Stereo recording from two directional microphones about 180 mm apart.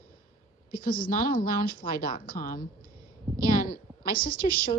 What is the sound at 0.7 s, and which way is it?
A woman's voice, 55° left (ahead or behind).